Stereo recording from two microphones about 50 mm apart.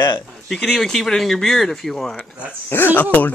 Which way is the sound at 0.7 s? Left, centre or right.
Centre.